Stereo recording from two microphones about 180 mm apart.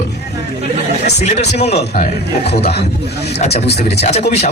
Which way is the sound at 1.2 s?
35° left (ahead or behind).